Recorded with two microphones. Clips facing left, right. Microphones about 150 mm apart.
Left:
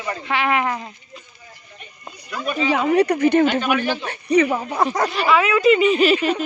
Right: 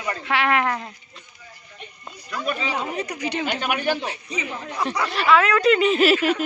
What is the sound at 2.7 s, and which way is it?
A man's voice, 90° left.